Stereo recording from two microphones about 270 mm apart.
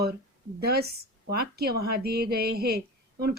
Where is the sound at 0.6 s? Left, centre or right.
Right.